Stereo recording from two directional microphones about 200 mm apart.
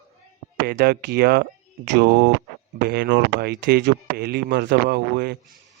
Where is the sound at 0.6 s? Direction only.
50° right (ahead or behind).